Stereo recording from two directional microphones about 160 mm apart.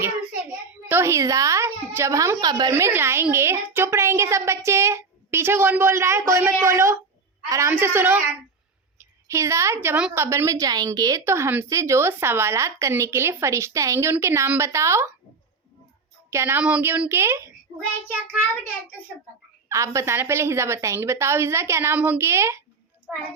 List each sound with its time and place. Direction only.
0.9 s a woman's voice: 15° right (ahead or behind)
16.3 s a woman's voice: 15° right (ahead or behind)
19.6 s a woman's voice: 20° right (ahead or behind)